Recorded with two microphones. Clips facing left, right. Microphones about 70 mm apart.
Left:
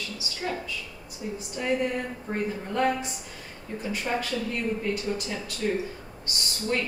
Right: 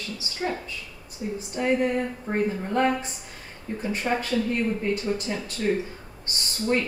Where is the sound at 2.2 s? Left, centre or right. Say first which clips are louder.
Right 4 dB; right.